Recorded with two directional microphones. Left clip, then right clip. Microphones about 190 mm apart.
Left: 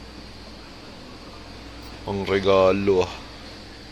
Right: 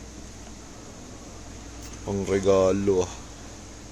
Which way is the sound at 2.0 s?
20° right (ahead or behind).